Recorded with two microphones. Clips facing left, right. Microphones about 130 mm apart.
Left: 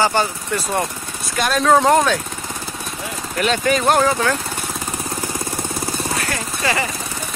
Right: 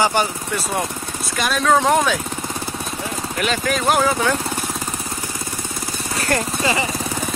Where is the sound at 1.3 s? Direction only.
Centre (ahead or behind).